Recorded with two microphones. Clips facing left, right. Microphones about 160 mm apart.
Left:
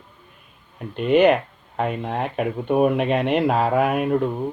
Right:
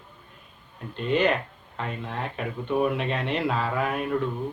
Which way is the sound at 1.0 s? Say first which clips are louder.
Left 8 dB; 60° left (ahead or behind).